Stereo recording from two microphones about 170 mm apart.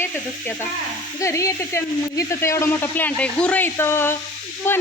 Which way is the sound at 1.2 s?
20° left (ahead or behind).